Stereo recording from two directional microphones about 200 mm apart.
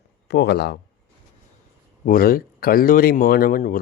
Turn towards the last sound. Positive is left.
turn(degrees=45)  # may be behind; listen again after turning